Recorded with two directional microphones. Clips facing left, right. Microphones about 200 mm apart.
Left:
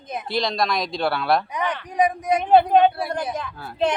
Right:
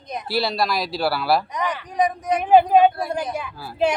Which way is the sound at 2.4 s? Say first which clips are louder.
Right 1 dB; 10° right (ahead or behind).